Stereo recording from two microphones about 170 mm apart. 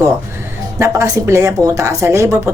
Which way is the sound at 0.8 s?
20° right (ahead or behind).